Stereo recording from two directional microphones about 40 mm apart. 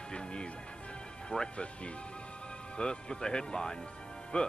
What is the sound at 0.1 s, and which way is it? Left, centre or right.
Music, left.